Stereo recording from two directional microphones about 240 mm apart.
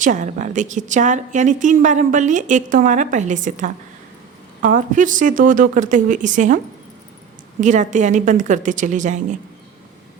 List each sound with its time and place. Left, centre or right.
0.0 s a woman's voice: right
7.6 s a woman's voice: right